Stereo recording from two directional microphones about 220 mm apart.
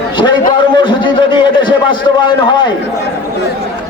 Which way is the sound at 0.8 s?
20° left (ahead or behind).